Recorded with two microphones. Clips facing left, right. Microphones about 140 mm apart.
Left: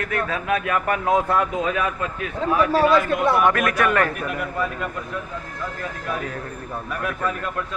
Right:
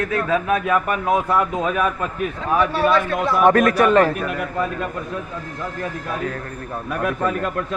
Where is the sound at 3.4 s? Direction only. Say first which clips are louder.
Right 5 dB; 35° right (ahead or behind).